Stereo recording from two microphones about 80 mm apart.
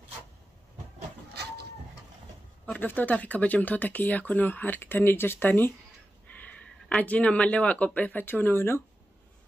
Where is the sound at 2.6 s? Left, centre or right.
Centre.